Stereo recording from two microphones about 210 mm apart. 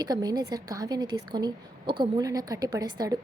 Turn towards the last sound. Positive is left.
turn(degrees=-20)  # may be behind; listen again after turning